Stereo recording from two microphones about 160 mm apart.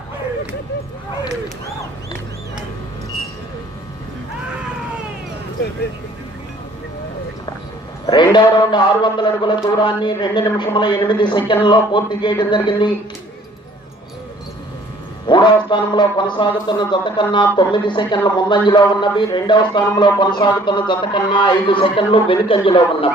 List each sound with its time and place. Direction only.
8.0 s a man's voice: 30° left (ahead or behind)
15.3 s a man's voice: 30° left (ahead or behind)